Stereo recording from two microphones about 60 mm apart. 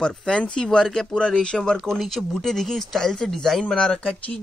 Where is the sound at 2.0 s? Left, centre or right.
Centre.